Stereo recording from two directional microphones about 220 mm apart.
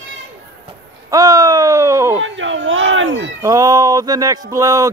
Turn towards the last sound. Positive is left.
turn(degrees=-15)  # may be behind; listen again after turning